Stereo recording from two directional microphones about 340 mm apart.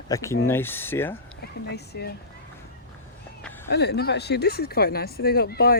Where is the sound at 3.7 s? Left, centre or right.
Left.